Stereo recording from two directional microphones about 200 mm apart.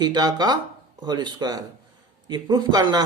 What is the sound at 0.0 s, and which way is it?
Speech, 20° right (ahead or behind).